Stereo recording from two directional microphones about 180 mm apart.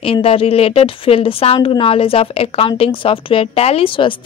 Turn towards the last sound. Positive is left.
turn(degrees=30)  # may be behind; listen again after turning